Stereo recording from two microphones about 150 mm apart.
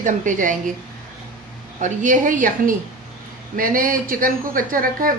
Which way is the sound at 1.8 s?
60° right (ahead or behind).